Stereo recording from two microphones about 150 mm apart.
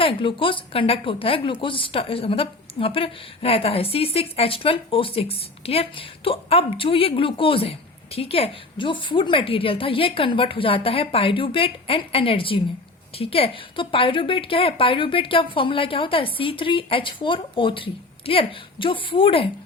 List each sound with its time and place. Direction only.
0.0 s a woman's voice: 35° left (ahead or behind)